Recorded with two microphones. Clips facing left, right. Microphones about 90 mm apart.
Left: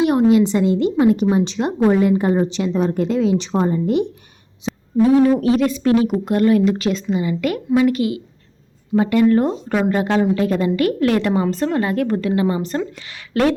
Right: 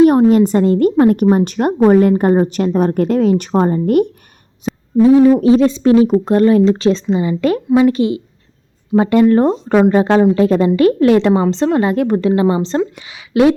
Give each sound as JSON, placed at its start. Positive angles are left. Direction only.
{"t": 0.0, "sound": "a woman's voice", "side_deg": -40}
{"t": 4.7, "sound": "a sound", "side_deg": 0}
{"t": 5.4, "sound": "a woman's voice", "side_deg": -25}